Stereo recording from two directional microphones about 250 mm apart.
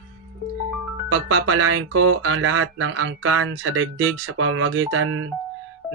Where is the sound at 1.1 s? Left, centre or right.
Right.